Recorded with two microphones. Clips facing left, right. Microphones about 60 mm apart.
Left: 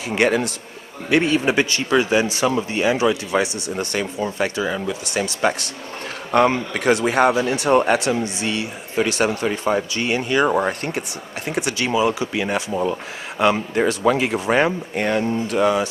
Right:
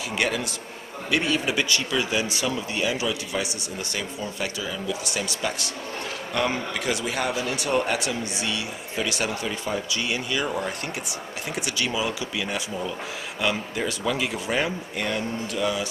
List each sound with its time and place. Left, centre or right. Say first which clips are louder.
0.1 s speech: left 9 dB; left
11.4 s speech: left 6 dB; left